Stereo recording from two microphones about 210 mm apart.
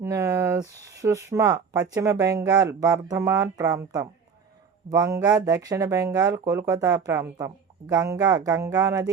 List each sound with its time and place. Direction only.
0.0 s speech: 15° right (ahead or behind)